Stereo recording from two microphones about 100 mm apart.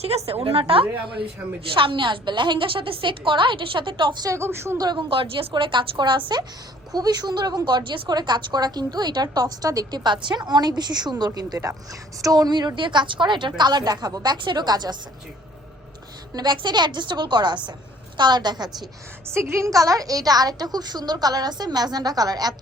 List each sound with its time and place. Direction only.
0.0 s a woman's voice: 90° right
0.7 s a woman's voice: 65° right (ahead or behind)
4.2 s a woman's voice: 30° right (ahead or behind)
4.8 s a woman's voice: 45° right (ahead or behind)
5.0 s a woman's voice: 65° right (ahead or behind); by 14.9 s 45° right (ahead or behind)
16.3 s a woman's voice: 45° right (ahead or behind)
19.3 s a woman's voice: 25° right (ahead or behind)